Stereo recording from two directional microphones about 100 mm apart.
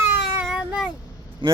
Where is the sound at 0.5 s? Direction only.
10° right (ahead or behind).